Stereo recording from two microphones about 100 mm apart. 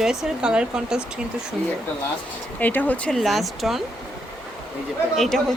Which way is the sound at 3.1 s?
Centre (ahead or behind).